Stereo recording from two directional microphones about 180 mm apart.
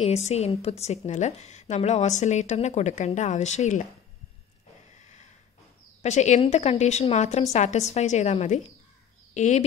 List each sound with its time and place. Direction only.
0.0 s a woman's voice: 35° left (ahead or behind)
4.9 s a sound: 40° left (ahead or behind)
6.0 s a woman's voice: 40° left (ahead or behind)